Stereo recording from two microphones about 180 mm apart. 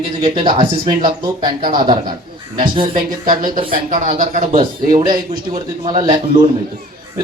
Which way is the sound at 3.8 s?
45° right (ahead or behind).